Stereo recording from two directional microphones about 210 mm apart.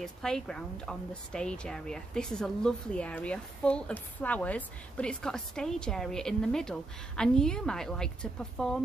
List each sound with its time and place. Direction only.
0.0 s a woman's voice: 5° left (ahead or behind)